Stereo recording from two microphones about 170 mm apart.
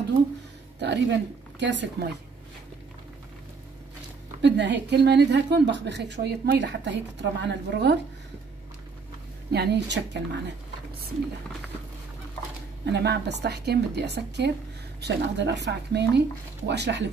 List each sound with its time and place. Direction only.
0.7 s a woman's voice: 90° right
4.4 s a woman's voice: 90° right
9.5 s a woman's voice: 85° right
12.8 s a woman's voice: 80° right